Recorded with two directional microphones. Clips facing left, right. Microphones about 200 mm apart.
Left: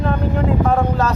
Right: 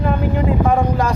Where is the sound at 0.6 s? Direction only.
15° right (ahead or behind).